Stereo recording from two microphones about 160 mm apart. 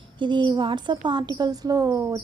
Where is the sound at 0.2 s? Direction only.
30° right (ahead or behind).